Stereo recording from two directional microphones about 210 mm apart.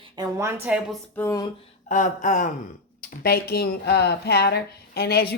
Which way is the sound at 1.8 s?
35° left (ahead or behind).